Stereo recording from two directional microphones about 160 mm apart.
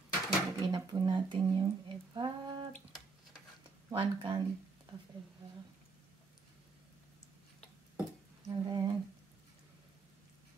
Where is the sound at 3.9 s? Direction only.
30° right (ahead or behind).